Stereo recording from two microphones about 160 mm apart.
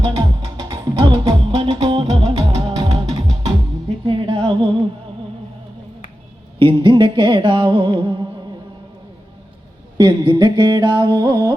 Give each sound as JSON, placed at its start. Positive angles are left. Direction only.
{"t": 0.0, "sound": "music", "side_deg": -30}
{"t": 6.6, "sound": "music", "side_deg": -30}
{"t": 10.0, "sound": "mantra", "side_deg": -25}